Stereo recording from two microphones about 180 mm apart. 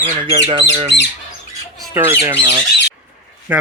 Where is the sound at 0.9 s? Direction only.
60° right (ahead or behind).